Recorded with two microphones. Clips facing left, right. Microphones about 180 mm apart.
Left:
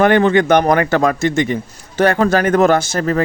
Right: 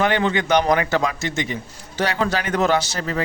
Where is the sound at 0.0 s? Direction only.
50° left (ahead or behind).